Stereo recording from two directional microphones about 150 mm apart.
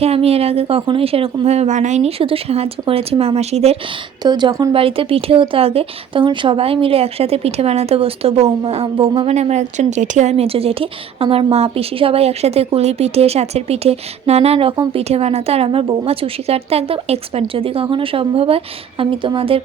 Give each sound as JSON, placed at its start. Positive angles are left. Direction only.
{"t": 0.0, "sound": "speech", "side_deg": -40}
{"t": 4.2, "sound": "speech", "side_deg": -30}
{"t": 4.7, "sound": "a woman's voice", "side_deg": -35}